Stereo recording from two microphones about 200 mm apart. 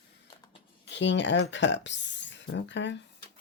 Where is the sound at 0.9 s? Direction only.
65° left (ahead or behind).